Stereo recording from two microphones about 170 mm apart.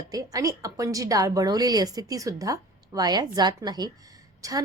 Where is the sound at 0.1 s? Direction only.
20° right (ahead or behind).